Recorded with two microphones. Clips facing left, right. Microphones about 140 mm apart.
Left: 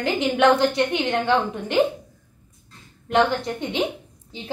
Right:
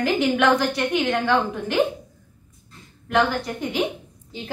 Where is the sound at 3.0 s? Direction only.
25° left (ahead or behind).